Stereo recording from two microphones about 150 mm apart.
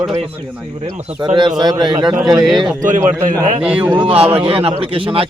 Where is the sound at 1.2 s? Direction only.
30° right (ahead or behind).